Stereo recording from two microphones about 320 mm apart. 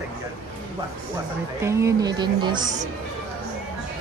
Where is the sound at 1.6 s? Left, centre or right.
Centre.